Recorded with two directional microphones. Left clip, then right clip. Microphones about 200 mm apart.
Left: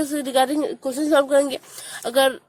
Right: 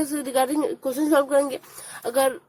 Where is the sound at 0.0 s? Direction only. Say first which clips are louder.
Left 3 dB; 30° left (ahead or behind).